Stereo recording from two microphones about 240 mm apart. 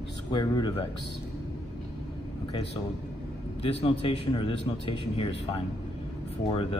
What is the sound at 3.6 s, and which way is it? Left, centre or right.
A man's voice, left.